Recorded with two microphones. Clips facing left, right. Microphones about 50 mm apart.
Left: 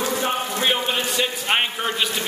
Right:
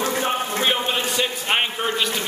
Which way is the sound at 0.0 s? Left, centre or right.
Right.